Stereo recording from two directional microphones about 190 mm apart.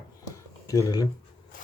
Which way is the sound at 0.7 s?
20° left (ahead or behind).